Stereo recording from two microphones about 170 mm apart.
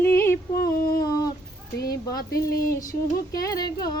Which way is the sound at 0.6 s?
60° left (ahead or behind).